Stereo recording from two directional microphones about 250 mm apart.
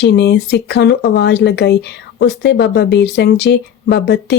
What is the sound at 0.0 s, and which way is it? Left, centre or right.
Speech, left.